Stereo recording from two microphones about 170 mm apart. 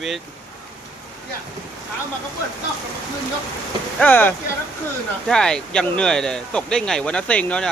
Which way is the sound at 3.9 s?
10° left (ahead or behind).